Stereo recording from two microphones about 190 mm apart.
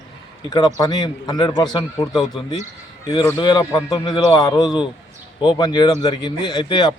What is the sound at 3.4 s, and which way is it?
A man's voice, 20° left (ahead or behind).